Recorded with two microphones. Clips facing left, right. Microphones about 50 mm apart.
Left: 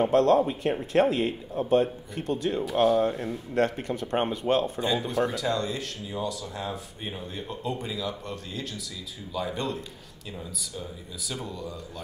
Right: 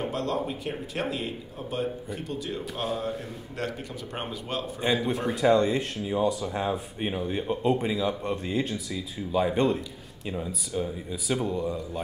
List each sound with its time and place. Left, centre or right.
0.0 s a man's voice: left
4.7 s speech: right
11.4 s speech: right